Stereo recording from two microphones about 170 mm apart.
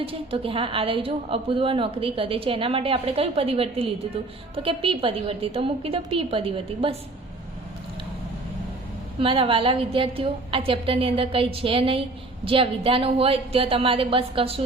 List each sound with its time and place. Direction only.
0.0 s a woman's voice: 35° right (ahead or behind)
9.2 s a woman's voice: 30° right (ahead or behind)